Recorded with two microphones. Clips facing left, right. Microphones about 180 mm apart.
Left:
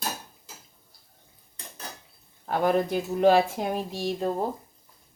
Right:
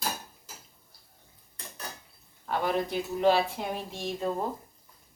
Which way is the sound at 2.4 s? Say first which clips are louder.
Left 5 dB; 45° left (ahead or behind).